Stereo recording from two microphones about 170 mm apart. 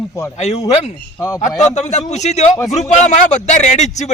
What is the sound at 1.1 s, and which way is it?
Speech, 20° left (ahead or behind).